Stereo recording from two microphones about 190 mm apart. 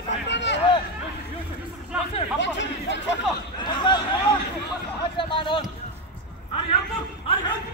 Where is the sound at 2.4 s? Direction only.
70° left (ahead or behind).